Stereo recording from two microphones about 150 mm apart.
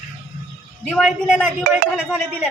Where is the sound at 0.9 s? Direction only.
5° left (ahead or behind).